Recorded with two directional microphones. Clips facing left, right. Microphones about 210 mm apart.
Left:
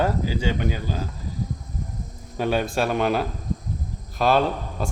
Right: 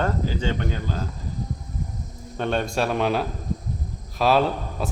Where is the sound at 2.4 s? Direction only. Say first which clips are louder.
Left 1 dB; 5° left (ahead or behind).